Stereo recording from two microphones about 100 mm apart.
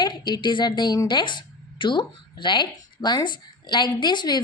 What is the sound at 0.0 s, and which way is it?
A woman's voice, 50° left (ahead or behind).